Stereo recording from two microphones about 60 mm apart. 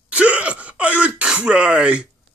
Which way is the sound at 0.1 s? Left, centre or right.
Right.